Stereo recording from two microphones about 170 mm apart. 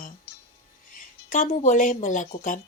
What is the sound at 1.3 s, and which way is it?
Speech, 45° left (ahead or behind).